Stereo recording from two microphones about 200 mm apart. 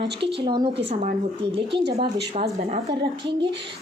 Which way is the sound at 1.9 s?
30° right (ahead or behind).